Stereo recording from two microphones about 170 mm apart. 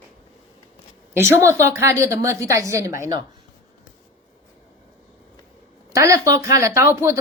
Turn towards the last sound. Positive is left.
turn(degrees=-15)  # may be behind; listen again after turning